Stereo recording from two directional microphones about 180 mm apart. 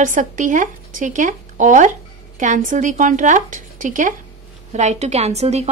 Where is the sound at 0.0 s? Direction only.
45° right (ahead or behind).